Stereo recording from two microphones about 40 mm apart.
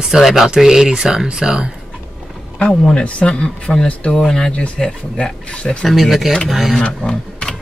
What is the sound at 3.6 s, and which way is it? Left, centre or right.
Speech, left.